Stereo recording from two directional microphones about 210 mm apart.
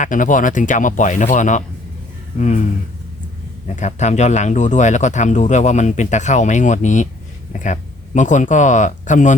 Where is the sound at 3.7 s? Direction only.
35° left (ahead or behind).